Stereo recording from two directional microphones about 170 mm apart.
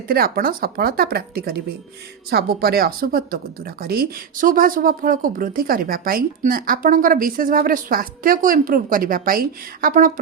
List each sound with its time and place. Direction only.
0.1 s speech: 60° right (ahead or behind)